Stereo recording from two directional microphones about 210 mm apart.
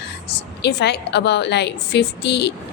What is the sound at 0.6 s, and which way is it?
A woman's voice, 55° left (ahead or behind).